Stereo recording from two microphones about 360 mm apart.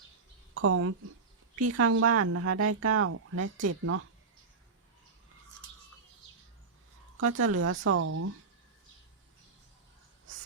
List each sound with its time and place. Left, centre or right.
0.5 s a woman's voice: right
7.2 s speech: right